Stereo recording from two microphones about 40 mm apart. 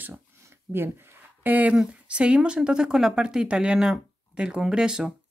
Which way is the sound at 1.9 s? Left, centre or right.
Right.